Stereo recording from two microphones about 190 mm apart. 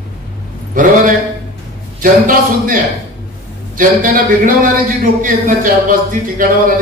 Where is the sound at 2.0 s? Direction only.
45° right (ahead or behind).